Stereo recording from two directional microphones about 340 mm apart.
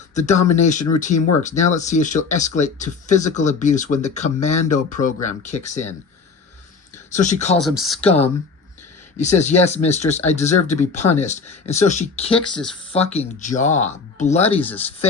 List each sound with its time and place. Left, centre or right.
0.1 s speech: left
7.1 s speech: left
7.8 s speech: centre
8.0 s speech: centre
14.6 s speech: centre